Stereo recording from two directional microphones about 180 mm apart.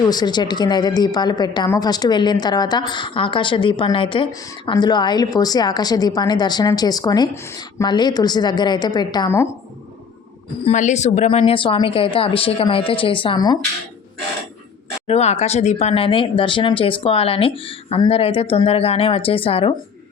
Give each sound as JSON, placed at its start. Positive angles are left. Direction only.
{"t": 0.1, "sound": "a woman's voice", "side_deg": 25}
{"t": 10.7, "sound": "a woman's voice", "side_deg": 40}
{"t": 15.0, "sound": "speech", "side_deg": 35}